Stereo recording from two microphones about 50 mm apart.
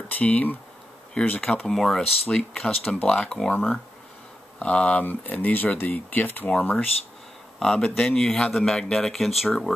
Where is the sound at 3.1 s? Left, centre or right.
Centre.